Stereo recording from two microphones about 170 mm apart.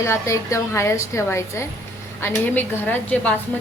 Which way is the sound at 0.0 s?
15° left (ahead or behind).